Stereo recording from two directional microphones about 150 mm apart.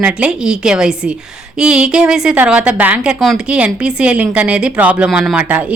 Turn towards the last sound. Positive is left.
turn(degrees=-10)  # may be behind; listen again after turning